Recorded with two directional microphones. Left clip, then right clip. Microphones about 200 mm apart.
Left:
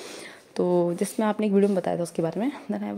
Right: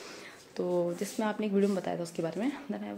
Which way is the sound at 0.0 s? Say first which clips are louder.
Left 6 dB; 40° left (ahead or behind).